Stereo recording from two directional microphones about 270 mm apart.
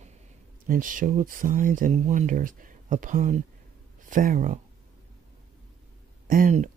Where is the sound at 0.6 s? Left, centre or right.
Right.